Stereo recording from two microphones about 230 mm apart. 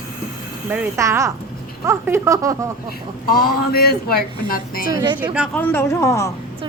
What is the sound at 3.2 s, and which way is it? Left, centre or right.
Speech, left.